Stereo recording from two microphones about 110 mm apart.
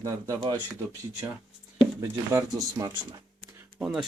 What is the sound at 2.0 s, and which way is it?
Speech, 30° right (ahead or behind).